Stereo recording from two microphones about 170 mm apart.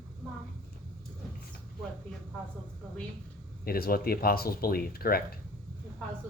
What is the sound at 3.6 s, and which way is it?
Speech, 60° left (ahead or behind).